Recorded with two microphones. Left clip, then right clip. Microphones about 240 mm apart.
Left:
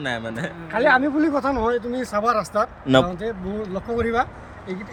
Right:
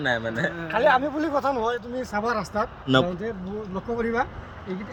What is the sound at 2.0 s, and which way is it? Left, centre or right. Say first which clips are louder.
Speech: left 5 dB; centre.